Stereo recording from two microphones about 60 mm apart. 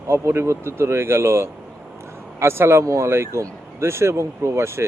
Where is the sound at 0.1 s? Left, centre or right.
Right.